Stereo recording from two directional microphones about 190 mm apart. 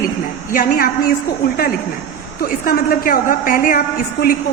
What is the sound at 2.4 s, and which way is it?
A woman's voice, 50° left (ahead or behind).